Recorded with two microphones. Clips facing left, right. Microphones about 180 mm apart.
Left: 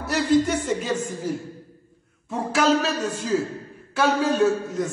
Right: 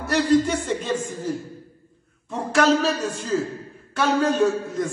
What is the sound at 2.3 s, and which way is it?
A man's voice, centre (ahead or behind).